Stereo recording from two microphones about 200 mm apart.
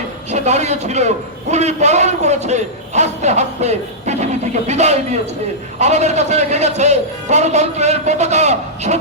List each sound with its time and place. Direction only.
0.3 s a man's voice: 35° right (ahead or behind)